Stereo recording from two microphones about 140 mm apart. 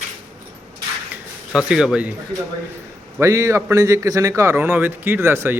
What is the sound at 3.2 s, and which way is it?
A man's voice, 20° right (ahead or behind).